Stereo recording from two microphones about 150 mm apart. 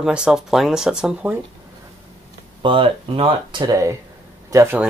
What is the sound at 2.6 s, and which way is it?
Speech, 35° right (ahead or behind).